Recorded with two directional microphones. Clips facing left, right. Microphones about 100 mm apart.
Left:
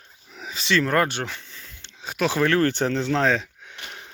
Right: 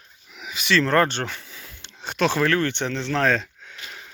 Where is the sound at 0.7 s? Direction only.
10° left (ahead or behind).